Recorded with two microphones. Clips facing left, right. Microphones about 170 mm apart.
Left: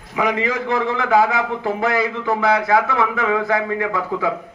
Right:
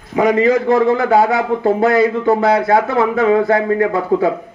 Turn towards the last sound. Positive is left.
turn(degrees=-40)  # may be behind; listen again after turning